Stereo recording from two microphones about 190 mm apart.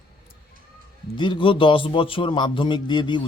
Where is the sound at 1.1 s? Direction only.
25° left (ahead or behind).